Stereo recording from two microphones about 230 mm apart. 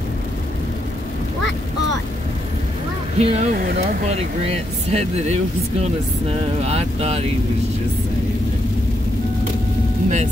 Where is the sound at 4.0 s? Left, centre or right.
Right.